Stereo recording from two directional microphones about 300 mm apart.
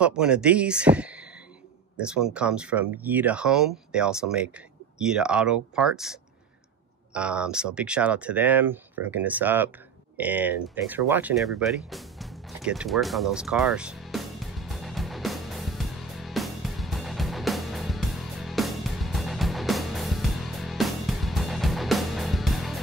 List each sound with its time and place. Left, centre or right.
0.0 s speech: centre
7.2 s speech: centre
12.5 s music: centre